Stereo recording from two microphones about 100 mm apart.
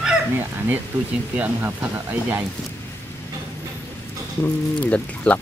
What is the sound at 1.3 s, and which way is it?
Speech, 15° right (ahead or behind).